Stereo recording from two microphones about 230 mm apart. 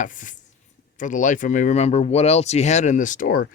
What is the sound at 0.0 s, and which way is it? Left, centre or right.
Speech, left.